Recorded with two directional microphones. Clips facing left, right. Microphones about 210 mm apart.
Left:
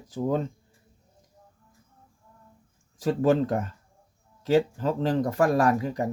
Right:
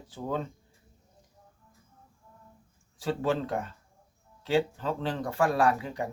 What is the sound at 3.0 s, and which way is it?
Speech, 45° left (ahead or behind).